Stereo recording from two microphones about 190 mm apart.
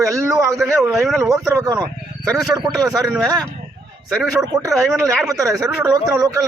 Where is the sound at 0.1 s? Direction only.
15° right (ahead or behind).